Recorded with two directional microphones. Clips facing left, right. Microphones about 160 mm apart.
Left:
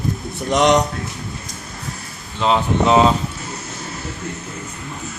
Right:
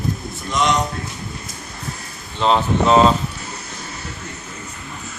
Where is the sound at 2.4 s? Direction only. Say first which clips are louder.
Even; 10° left (ahead or behind).